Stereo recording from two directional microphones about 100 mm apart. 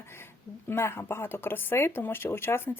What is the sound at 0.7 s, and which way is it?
Speech, 25° left (ahead or behind).